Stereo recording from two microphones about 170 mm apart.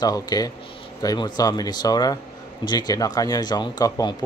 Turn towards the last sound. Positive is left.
turn(degrees=20)  # may be behind; listen again after turning